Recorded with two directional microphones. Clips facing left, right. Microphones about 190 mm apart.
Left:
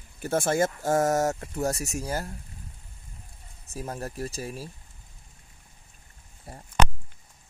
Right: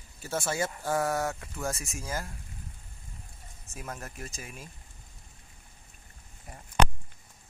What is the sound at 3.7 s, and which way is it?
Speech, 30° left (ahead or behind).